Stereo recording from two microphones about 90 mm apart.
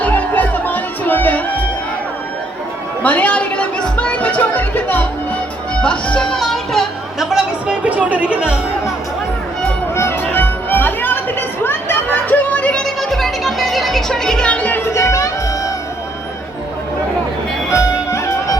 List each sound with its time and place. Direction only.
0.0 s music: 20° left (ahead or behind)
3.0 s music: 15° left (ahead or behind); by 8.5 s 10° right (ahead or behind)
9.9 s music: 30° left (ahead or behind)
13.0 s music: 5° left (ahead or behind)
14.8 s music: 35° left (ahead or behind)